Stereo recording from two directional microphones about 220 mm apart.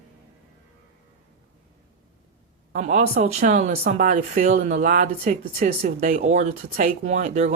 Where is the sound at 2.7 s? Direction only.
35° right (ahead or behind).